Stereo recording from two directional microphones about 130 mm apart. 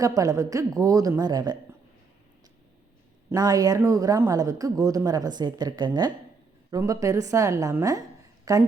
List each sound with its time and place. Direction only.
0.0 s speech: 25° right (ahead or behind)
3.2 s speech: 30° right (ahead or behind)